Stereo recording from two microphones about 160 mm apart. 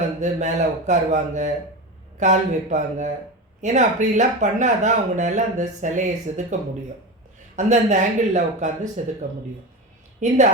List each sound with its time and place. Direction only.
0.2 s speech: 50° right (ahead or behind)
10.2 s speech: 50° right (ahead or behind)